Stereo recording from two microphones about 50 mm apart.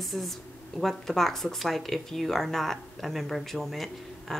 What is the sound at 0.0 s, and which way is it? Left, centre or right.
Speech, centre.